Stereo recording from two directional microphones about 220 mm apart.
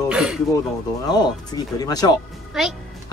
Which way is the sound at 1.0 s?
20° left (ahead or behind).